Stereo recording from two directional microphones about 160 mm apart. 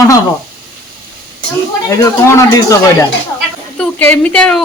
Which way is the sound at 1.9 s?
15° left (ahead or behind).